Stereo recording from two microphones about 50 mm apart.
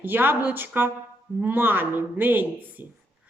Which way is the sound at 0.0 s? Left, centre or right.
Right.